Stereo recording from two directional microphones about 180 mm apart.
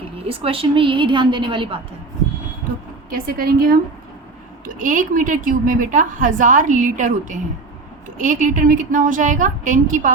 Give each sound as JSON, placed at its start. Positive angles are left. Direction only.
{"t": 0.3, "sound": "a woman's voice", "side_deg": -30}
{"t": 3.1, "sound": "a woman's voice", "side_deg": -55}